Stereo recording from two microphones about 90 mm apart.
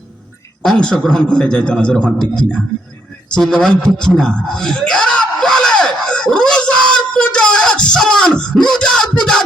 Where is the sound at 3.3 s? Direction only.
5° left (ahead or behind).